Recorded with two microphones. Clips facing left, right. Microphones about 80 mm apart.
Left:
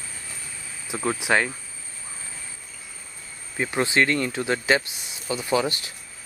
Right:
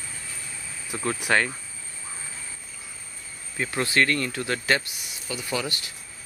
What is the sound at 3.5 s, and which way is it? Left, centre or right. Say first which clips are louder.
Speech: left 2 dB; centre.